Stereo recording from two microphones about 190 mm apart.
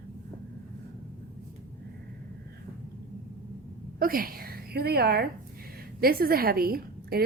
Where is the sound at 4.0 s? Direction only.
50° right (ahead or behind).